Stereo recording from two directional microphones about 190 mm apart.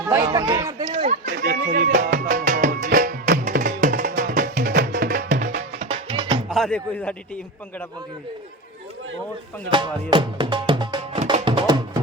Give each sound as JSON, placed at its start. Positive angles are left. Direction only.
{"t": 0.3, "sound": "speech", "side_deg": -15}
{"t": 1.2, "sound": "run", "side_deg": -55}
{"t": 1.6, "sound": "music", "side_deg": -40}
{"t": 5.8, "sound": "music", "side_deg": -30}
{"t": 6.5, "sound": "speech", "side_deg": 0}
{"t": 9.6, "sound": "speech", "side_deg": -25}
{"t": 11.3, "sound": "music", "side_deg": -25}